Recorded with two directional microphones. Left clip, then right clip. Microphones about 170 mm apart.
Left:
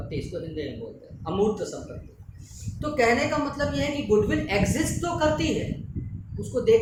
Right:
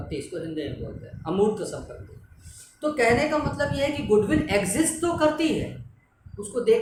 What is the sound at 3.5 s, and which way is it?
Speech, 15° right (ahead or behind).